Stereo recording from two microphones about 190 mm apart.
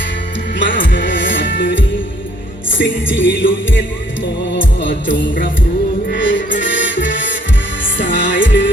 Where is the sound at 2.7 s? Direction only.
80° left.